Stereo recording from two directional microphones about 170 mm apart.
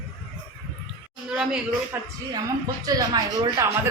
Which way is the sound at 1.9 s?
10° right (ahead or behind).